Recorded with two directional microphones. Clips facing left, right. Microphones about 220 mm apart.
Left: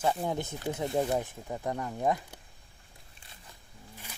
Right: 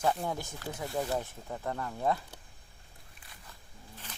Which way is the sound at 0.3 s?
20° left (ahead or behind).